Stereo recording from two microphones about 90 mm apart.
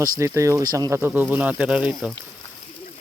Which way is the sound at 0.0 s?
35° right (ahead or behind).